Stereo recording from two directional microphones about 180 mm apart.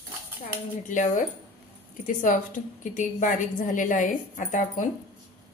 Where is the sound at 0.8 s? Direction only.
45° left (ahead or behind).